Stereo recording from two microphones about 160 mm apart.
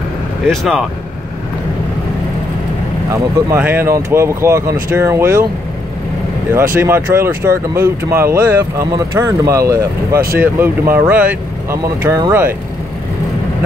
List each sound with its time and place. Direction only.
0.5 s speech: centre (ahead or behind)
3.5 s speech: 10° right (ahead or behind)
6.7 s speech: 15° right (ahead or behind)